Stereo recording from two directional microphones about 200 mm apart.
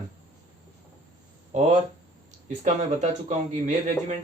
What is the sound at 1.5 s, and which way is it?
Speech, 35° right (ahead or behind).